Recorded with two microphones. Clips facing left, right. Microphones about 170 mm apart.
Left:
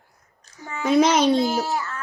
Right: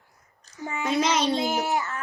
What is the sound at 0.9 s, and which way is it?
Speech, 50° left (ahead or behind).